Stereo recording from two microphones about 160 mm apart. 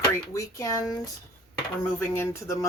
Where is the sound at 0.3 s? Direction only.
20° left (ahead or behind).